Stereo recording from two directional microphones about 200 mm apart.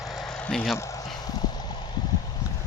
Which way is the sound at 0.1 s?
Centre (ahead or behind).